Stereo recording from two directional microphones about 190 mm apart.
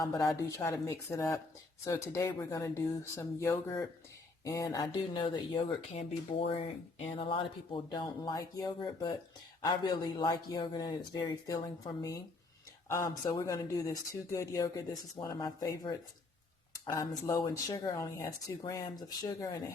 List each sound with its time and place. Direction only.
0.0 s speech: 15° left (ahead or behind)
7.2 s speech: 25° left (ahead or behind)